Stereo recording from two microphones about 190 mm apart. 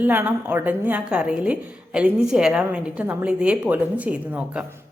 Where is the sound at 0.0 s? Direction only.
10° right (ahead or behind).